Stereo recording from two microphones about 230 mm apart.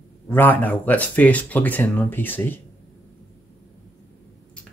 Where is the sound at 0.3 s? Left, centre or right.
Centre.